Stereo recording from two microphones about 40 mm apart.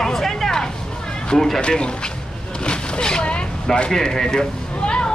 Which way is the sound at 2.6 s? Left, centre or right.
Left.